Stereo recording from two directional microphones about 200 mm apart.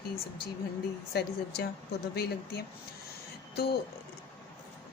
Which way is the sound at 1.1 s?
55° left (ahead or behind).